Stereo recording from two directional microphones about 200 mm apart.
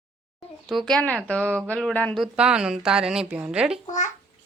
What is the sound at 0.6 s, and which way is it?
Speech, centre (ahead or behind).